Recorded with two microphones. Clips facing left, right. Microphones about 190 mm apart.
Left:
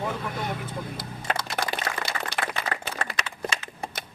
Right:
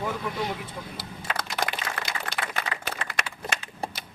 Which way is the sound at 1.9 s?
50° left (ahead or behind).